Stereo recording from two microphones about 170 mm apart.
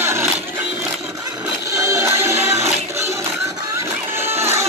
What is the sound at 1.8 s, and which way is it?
Music, 15° right (ahead or behind).